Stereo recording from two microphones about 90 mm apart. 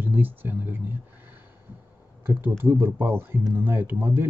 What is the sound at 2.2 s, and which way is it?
Speech, 20° right (ahead or behind).